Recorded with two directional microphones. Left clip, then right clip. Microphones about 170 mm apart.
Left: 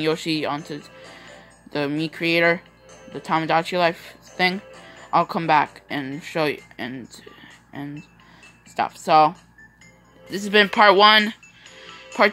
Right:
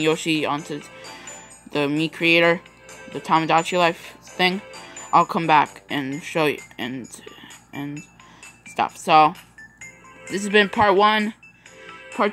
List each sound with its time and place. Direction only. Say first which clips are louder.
0.0 s speech: right 2 dB; 5° right (ahead or behind)
2.9 s music: right 3 dB; 30° right (ahead or behind)
3.2 s speech: right 2 dB; 5° right (ahead or behind)
4.6 s speech: right 3 dB; 35° right (ahead or behind)
5.0 s speech: right 2 dB; 5° right (ahead or behind)
10.3 s speech: left 1 dB; 5° right (ahead or behind)